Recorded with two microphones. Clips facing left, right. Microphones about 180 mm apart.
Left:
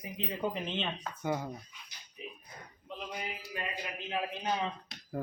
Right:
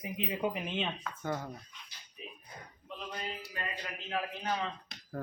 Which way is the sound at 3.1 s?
15° left (ahead or behind).